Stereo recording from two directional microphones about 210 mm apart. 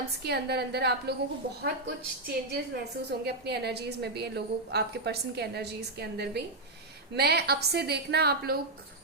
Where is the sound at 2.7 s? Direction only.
50° right (ahead or behind).